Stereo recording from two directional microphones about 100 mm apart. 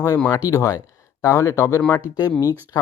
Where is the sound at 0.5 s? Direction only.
30° left (ahead or behind).